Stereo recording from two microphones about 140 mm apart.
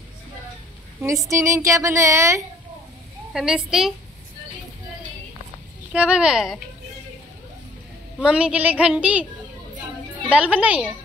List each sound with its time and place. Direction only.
1.0 s a woman's voice: 20° right (ahead or behind)
3.3 s speech: 5° right (ahead or behind)
5.9 s speech: 10° right (ahead or behind)
8.2 s a woman's voice: 5° right (ahead or behind)
10.3 s a woman's voice: 10° right (ahead or behind)